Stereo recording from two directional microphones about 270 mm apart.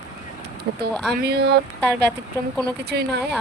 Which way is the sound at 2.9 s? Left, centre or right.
Right.